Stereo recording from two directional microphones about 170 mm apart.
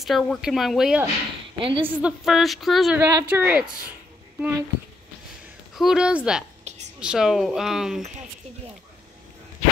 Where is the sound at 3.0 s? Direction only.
15° right (ahead or behind).